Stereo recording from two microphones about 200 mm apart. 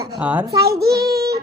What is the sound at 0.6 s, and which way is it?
Speech, 50° right (ahead or behind).